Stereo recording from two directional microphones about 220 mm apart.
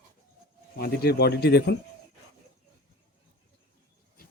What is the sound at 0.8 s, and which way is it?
Speech, 45° left (ahead or behind).